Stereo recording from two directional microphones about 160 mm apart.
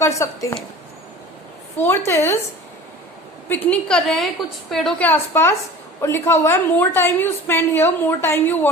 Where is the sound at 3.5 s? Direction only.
5° left (ahead or behind).